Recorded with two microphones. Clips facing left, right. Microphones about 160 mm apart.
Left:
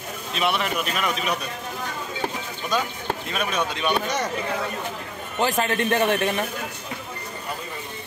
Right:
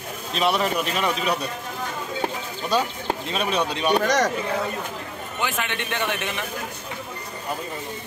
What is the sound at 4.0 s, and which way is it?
Speech, 90° right.